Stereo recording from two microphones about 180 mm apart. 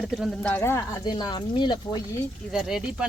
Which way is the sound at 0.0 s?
Centre (ahead or behind).